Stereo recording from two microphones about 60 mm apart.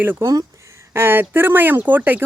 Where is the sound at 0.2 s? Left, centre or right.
Right.